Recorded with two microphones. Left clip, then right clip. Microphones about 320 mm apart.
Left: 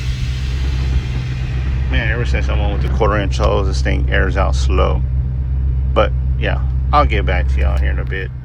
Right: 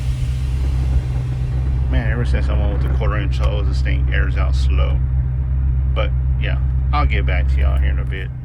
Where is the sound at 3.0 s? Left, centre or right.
Centre.